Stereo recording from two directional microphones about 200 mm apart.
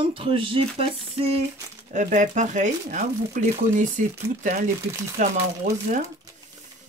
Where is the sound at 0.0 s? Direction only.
25° right (ahead or behind); by 5.8 s 40° right (ahead or behind).